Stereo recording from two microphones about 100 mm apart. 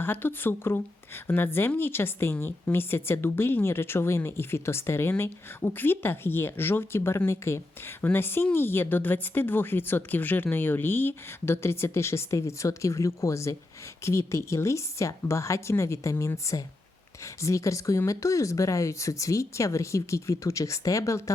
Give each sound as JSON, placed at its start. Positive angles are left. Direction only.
{"t": 0.0, "sound": "speech", "side_deg": 20}